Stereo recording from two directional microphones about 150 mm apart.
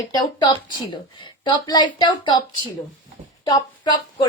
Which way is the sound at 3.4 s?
30° left (ahead or behind).